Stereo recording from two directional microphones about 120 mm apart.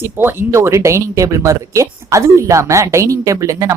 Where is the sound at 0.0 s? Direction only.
20° right (ahead or behind).